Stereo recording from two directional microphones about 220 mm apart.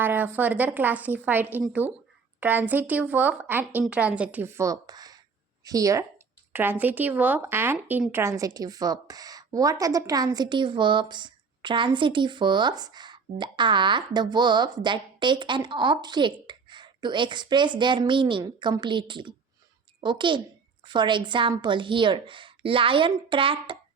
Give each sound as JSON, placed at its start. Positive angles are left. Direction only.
{"t": 0.0, "sound": "a woman's voice", "side_deg": -10}